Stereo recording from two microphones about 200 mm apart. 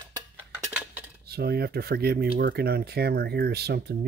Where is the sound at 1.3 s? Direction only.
50° right (ahead or behind).